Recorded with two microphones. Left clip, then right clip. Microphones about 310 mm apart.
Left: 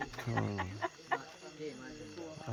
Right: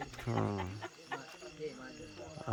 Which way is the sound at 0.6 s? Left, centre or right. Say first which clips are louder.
Left 5 dB; centre.